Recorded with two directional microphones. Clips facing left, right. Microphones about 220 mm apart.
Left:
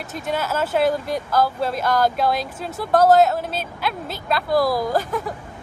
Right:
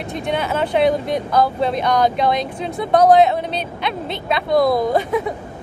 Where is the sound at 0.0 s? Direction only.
5° left (ahead or behind).